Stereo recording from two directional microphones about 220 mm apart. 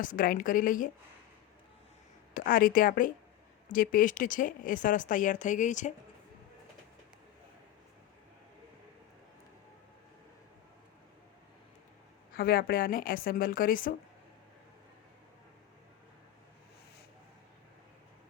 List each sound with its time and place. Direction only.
0.0 s speech: 40° left (ahead or behind)
2.3 s speech: 40° left (ahead or behind)
12.3 s speech: 40° left (ahead or behind)